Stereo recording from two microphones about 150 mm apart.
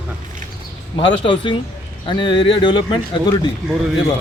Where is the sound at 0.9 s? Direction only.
35° left (ahead or behind).